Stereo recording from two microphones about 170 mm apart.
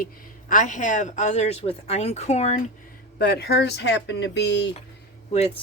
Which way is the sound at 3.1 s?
70° left (ahead or behind).